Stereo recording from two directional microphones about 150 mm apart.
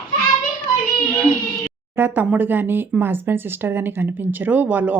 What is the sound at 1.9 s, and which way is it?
Speech, 15° right (ahead or behind).